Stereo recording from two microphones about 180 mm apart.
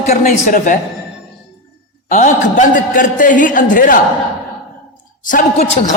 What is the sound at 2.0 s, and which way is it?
A man's voice, 45° left (ahead or behind).